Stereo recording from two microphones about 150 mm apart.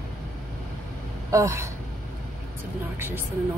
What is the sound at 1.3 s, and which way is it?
Speech, 20° right (ahead or behind).